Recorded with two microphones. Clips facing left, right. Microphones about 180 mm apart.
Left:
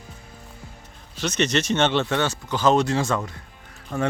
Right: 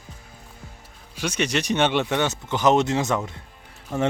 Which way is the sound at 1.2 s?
10° right (ahead or behind).